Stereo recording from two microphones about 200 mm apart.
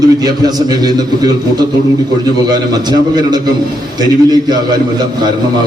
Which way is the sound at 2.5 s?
20° right (ahead or behind).